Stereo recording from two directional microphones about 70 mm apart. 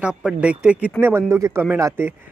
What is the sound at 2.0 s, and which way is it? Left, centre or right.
Speech, right.